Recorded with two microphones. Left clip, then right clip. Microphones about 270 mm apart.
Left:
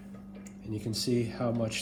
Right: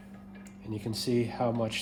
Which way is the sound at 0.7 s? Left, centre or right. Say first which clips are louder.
Even; right.